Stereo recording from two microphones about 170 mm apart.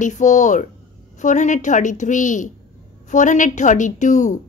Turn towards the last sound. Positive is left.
turn(degrees=45)  # may be behind; listen again after turning